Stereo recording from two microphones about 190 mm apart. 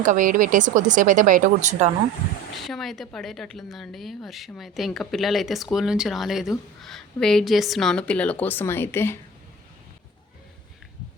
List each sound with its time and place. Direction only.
0.0 s speech: 45° right (ahead or behind)
2.6 s a woman's voice: centre (ahead or behind)